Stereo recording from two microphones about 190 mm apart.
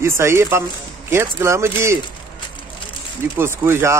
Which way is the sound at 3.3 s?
10° right (ahead or behind).